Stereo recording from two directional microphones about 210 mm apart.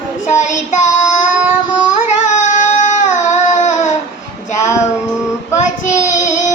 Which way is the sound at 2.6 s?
35° left (ahead or behind).